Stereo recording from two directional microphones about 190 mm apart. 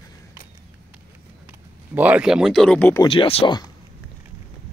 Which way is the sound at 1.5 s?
10° right (ahead or behind).